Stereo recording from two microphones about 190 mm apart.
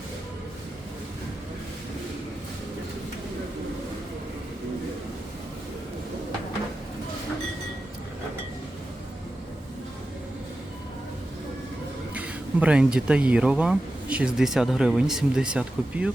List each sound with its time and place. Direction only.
12.1 s speech: 5° right (ahead or behind)